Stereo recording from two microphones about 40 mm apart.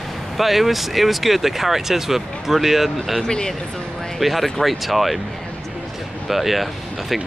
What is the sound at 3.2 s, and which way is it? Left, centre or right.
Speech, centre.